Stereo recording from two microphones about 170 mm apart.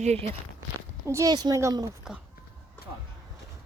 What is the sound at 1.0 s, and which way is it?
Speech, 15° right (ahead or behind).